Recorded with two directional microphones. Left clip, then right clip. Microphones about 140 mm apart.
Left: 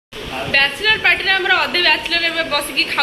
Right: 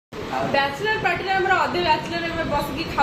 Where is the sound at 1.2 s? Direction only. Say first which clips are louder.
Left 4 dB; 15° left (ahead or behind).